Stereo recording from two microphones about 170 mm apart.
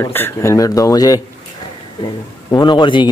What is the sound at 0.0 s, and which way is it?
Speech, 15° left (ahead or behind).